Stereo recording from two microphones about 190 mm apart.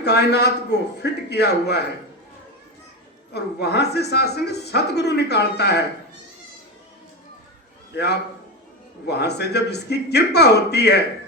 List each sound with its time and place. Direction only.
0.0 s speech: 60° left (ahead or behind)
3.3 s speech: 60° left (ahead or behind)
7.9 s speech: 60° left (ahead or behind)